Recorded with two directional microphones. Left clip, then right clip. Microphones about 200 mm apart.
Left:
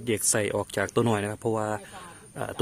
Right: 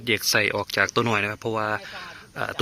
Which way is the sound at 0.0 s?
15° left (ahead or behind).